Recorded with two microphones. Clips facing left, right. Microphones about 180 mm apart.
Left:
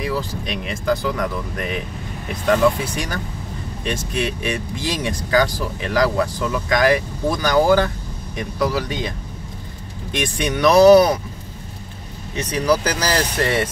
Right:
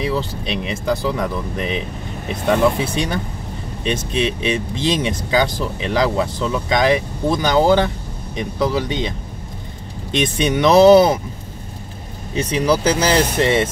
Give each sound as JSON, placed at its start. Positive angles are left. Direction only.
{"t": 0.0, "sound": "speech", "side_deg": -25}
{"t": 2.8, "sound": "speech", "side_deg": -25}
{"t": 10.1, "sound": "speech", "side_deg": -20}
{"t": 12.4, "sound": "speech", "side_deg": -30}